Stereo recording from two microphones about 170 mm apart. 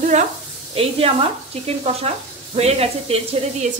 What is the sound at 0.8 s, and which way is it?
Speech, 35° right (ahead or behind).